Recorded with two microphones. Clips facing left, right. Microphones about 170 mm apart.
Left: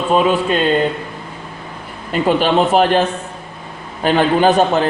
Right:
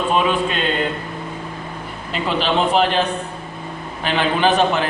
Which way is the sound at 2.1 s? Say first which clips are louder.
Left 6 dB; 45° left (ahead or behind).